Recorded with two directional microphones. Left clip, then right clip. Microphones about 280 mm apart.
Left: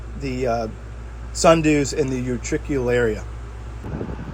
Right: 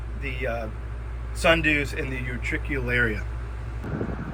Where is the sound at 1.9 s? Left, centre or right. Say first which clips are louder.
Left 9 dB; left.